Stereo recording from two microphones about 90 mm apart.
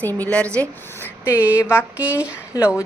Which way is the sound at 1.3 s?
20° right (ahead or behind).